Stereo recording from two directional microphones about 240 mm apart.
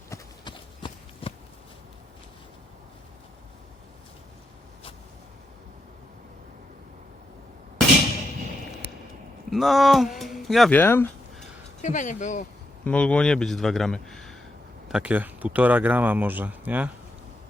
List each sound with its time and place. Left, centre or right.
0.1 s horse: centre
9.5 s speech: centre
11.8 s speech: left
12.8 s speech: centre